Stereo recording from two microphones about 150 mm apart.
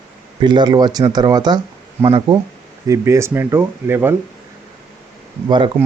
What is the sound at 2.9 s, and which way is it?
Speech, 20° right (ahead or behind).